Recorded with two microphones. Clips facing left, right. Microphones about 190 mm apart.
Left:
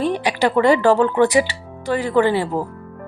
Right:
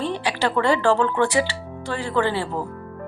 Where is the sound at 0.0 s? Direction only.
15° left (ahead or behind).